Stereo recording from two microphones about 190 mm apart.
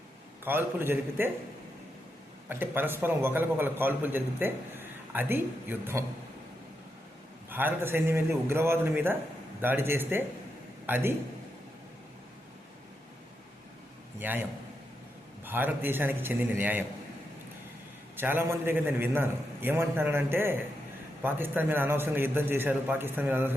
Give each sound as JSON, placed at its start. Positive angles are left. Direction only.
{"t": 0.4, "sound": "a man's voice", "side_deg": -10}
{"t": 2.5, "sound": "a man's voice", "side_deg": -10}
{"t": 7.5, "sound": "a man's voice", "side_deg": -10}
{"t": 14.2, "sound": "a man's voice", "side_deg": -10}
{"t": 15.4, "sound": "a man's voice", "side_deg": -10}
{"t": 18.2, "sound": "a man's voice", "side_deg": -10}